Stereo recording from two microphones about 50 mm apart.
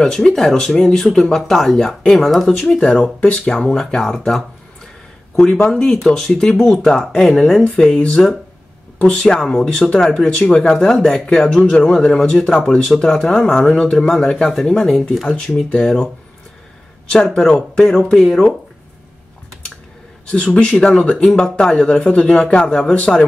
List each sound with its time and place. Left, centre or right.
0.0 s speech: centre
5.4 s speech: centre
13.7 s speech: centre
17.1 s speech: centre
20.2 s speech: left